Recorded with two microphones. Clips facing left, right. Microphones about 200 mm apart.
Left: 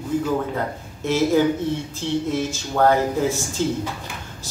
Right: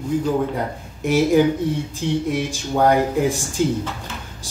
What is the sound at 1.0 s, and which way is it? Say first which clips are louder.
Speech: right 2 dB; 15° right (ahead or behind).